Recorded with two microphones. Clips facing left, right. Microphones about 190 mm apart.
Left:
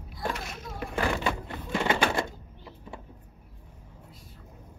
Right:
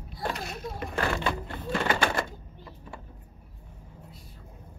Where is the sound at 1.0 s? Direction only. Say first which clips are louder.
Left 1 dB; 15° left (ahead or behind).